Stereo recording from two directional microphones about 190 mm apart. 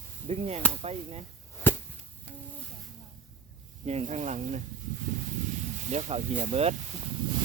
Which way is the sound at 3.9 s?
35° right (ahead or behind).